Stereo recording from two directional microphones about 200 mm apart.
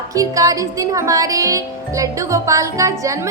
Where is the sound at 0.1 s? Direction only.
15° right (ahead or behind).